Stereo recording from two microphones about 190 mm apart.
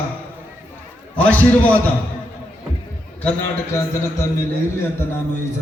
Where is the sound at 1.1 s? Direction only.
10° left (ahead or behind).